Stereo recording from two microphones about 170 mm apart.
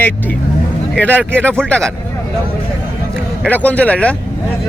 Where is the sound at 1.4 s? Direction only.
5° left (ahead or behind).